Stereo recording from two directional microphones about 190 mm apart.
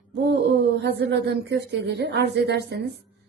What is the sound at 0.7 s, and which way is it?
A woman's voice, 65° right (ahead or behind).